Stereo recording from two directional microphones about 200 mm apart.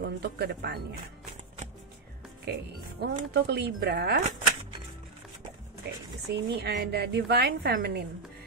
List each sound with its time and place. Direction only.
0.0 s speech: 55° right (ahead or behind)
2.5 s a woman's voice: 55° right (ahead or behind)
5.9 s a woman's voice: 55° right (ahead or behind)